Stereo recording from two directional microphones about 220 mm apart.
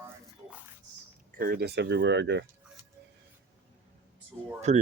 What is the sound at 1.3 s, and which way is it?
Speech, 40° right (ahead or behind).